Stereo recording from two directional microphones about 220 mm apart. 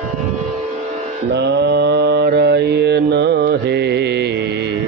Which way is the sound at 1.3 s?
50° right (ahead or behind).